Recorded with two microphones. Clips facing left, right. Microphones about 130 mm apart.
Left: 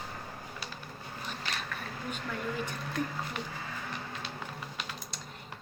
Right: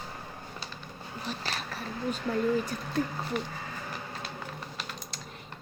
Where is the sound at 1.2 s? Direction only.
35° right (ahead or behind).